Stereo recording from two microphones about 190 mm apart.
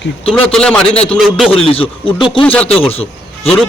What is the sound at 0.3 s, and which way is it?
A man's voice, 5° left (ahead or behind).